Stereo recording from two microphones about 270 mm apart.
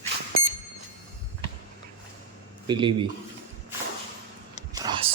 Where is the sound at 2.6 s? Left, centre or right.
Centre.